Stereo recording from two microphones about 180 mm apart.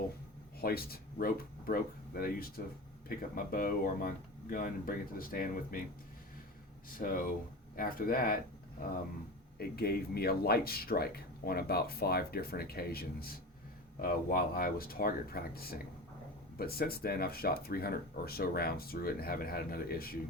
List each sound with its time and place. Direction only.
0.6 s speech: 55° left (ahead or behind)
7.0 s speech: 50° left (ahead or behind)
9.6 s speech: 60° left (ahead or behind)